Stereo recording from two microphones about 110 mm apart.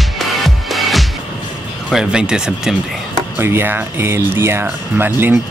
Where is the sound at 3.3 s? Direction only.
20° right (ahead or behind).